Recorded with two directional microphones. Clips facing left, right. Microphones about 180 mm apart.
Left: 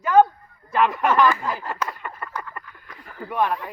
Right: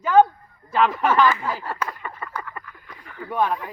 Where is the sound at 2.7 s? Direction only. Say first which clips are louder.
Right 1 dB; centre (ahead or behind).